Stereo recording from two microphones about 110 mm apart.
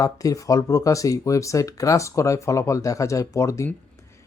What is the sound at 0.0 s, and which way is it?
Speech, 30° left (ahead or behind).